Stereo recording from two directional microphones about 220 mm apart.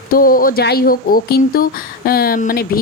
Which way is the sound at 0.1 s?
40° left (ahead or behind).